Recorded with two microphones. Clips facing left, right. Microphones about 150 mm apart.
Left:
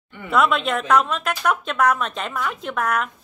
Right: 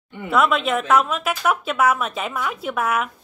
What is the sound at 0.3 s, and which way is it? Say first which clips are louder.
A woman's voice: right 1 dB; centre (ahead or behind).